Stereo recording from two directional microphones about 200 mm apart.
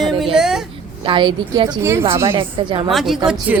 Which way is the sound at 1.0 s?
25° right (ahead or behind).